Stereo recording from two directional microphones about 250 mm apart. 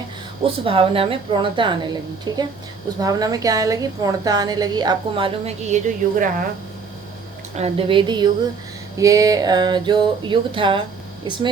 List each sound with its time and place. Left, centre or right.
0.4 s a woman's voice: right
7.5 s a woman's voice: right